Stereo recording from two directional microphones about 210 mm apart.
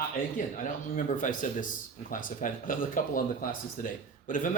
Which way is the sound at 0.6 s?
40° left (ahead or behind).